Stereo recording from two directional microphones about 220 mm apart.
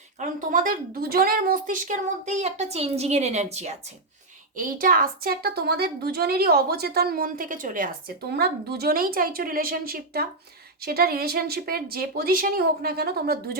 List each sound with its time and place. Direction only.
0.2 s a woman's voice: 40° right (ahead or behind)